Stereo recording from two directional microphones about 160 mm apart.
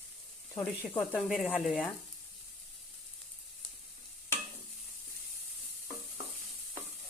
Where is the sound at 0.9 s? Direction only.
Centre (ahead or behind).